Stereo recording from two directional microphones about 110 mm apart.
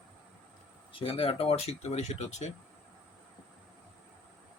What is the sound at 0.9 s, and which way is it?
Speech, 55° left (ahead or behind).